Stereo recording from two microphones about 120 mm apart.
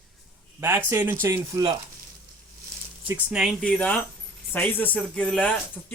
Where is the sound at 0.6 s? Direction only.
20° right (ahead or behind).